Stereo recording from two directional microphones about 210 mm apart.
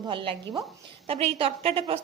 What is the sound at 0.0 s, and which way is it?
A woman's voice, 25° right (ahead or behind).